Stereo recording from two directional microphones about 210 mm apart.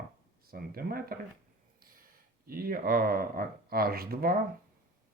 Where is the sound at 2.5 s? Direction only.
45° right (ahead or behind).